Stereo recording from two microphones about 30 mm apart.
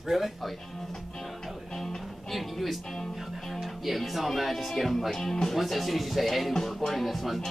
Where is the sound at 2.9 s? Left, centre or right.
Centre.